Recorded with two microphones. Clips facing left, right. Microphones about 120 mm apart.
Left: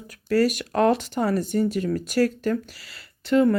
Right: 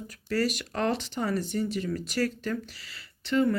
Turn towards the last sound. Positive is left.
turn(degrees=50)  # may be behind; listen again after turning